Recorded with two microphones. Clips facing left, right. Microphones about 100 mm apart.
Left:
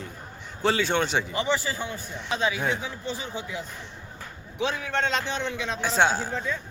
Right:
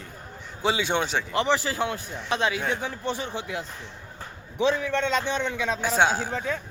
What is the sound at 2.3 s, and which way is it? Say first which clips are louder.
Speech: right 1 dB; 60° right (ahead or behind).